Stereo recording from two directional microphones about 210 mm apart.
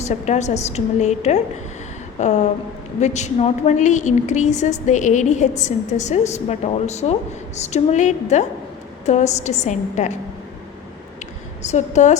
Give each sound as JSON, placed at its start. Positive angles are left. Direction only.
{"t": 0.0, "sound": "a woman's voice", "side_deg": 35}
{"t": 11.6, "sound": "a woman's voice", "side_deg": 35}